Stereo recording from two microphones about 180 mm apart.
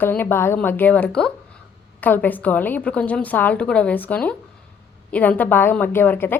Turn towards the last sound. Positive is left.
turn(degrees=10)  # may be behind; listen again after turning